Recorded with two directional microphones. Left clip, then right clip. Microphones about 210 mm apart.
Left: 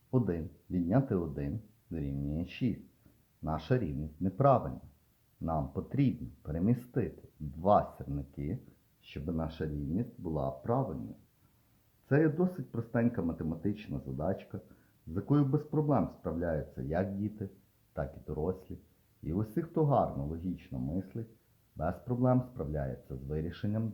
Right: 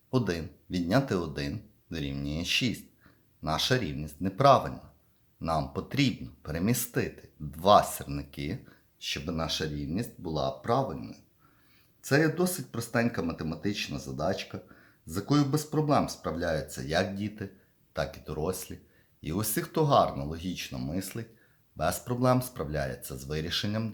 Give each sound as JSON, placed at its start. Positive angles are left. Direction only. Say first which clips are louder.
{"t": 0.1, "sound": "speech", "louder": "right 3 dB", "side_deg": -5}
{"t": 5.7, "sound": "speech", "louder": "right 4 dB", "side_deg": -5}
{"t": 12.0, "sound": "speech", "louder": "right 4 dB", "side_deg": 0}